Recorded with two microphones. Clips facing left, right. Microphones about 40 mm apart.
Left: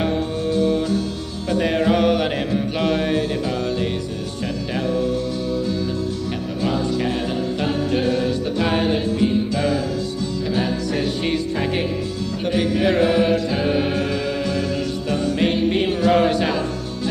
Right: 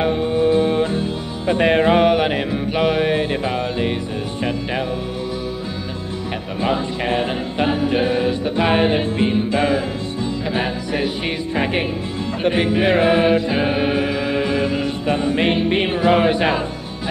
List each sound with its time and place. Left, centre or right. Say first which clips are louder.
0.0 s music: right 5 dB; right
6.6 s music: right 1 dB; right